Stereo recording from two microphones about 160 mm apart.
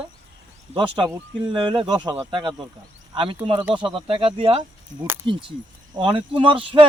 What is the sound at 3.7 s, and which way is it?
Speech, 35° right (ahead or behind).